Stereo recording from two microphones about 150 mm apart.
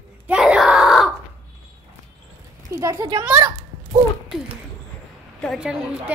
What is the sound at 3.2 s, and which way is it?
Speech, 10° right (ahead or behind).